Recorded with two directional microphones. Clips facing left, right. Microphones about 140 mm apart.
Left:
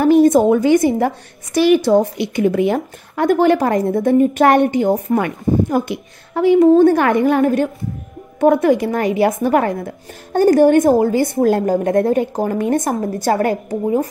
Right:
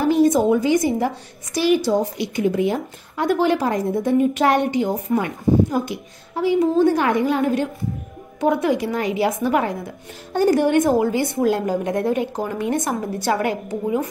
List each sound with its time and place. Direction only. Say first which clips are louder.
0.0 s a woman's voice: left 5 dB; 55° left (ahead or behind)